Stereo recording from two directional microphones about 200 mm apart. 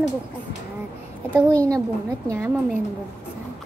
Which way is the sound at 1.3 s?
15° right (ahead or behind).